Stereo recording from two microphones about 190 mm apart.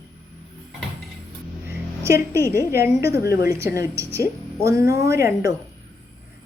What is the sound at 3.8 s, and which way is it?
A woman's voice, 15° right (ahead or behind).